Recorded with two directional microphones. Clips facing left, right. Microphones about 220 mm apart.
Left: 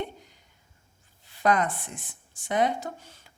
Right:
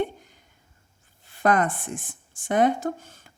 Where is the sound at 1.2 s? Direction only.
50° right (ahead or behind).